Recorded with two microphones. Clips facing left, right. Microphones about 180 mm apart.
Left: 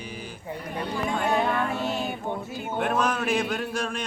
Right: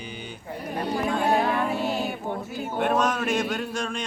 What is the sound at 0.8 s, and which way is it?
Speech, 35° right (ahead or behind).